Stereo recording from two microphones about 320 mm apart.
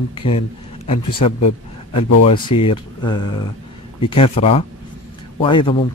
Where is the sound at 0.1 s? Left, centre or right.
Centre.